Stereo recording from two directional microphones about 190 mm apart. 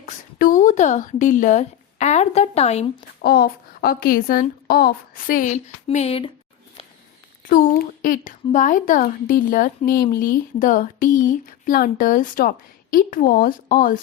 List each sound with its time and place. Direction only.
0.0 s speech: 45° left (ahead or behind)
3.2 s a woman's voice: 55° left (ahead or behind); by 6.3 s 30° left (ahead or behind)
7.4 s a woman's voice: 45° left (ahead or behind)